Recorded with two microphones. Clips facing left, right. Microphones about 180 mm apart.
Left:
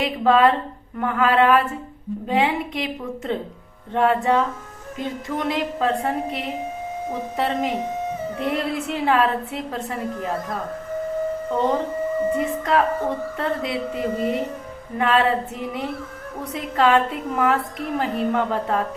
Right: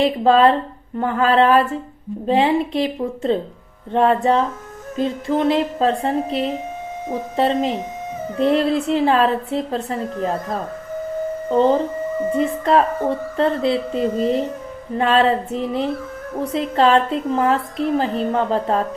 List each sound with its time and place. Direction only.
0.0 s a woman's voice: 30° right (ahead or behind)